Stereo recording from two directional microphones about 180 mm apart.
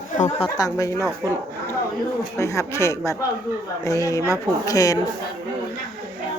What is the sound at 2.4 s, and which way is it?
A man's voice, 15° left (ahead or behind).